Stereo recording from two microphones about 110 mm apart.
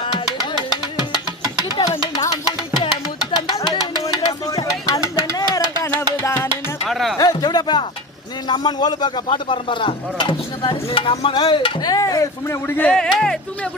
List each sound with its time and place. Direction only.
2.7 s music: 40° left (ahead or behind); by 6.5 s 25° left (ahead or behind)
6.8 s music: centre (ahead or behind)
7.2 s a sound: 35° left (ahead or behind)
8.4 s a man's voice: 40° left (ahead or behind)
9.2 s stir: 50° left (ahead or behind)
11.3 s a man's voice: 45° left (ahead or behind)
11.9 s speech: 35° left (ahead or behind)
12.9 s speech: 5° left (ahead or behind)